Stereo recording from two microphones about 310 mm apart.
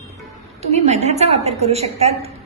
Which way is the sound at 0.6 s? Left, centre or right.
Right.